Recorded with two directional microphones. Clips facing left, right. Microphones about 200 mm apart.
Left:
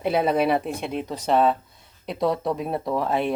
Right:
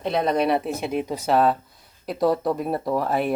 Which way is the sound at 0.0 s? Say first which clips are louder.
Left 1 dB; 5° left (ahead or behind).